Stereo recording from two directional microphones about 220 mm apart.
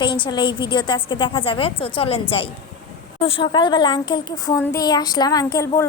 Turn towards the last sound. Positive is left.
turn(degrees=15)  # may be behind; listen again after turning